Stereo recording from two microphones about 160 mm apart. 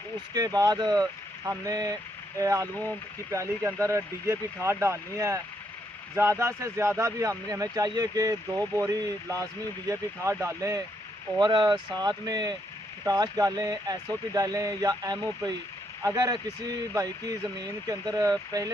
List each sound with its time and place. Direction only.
0.3 s speech: 25° right (ahead or behind)
6.4 s speech: 20° right (ahead or behind)